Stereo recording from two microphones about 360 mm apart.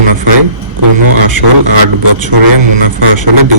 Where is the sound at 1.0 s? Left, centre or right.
Right.